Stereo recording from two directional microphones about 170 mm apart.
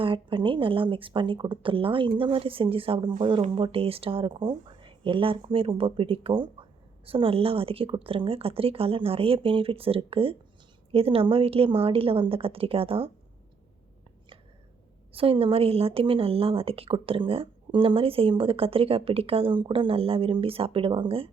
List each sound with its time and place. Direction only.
0.0 s speech: 30° right (ahead or behind)
15.1 s speech: 35° right (ahead or behind)